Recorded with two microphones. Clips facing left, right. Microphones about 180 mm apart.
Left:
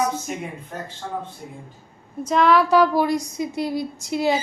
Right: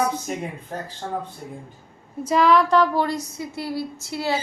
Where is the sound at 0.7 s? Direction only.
35° right (ahead or behind).